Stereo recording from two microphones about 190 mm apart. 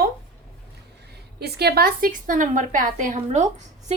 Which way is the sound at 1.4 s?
60° right (ahead or behind).